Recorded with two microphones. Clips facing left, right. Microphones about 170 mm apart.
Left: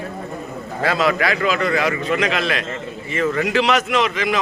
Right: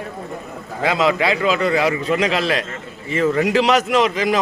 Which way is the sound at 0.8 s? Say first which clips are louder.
Right 1 dB; 20° right (ahead or behind).